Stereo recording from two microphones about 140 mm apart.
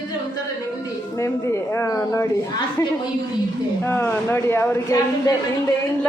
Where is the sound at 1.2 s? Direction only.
20° left (ahead or behind).